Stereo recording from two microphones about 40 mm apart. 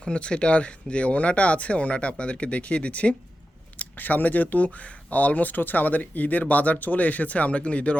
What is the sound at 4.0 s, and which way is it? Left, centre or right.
Speech, left.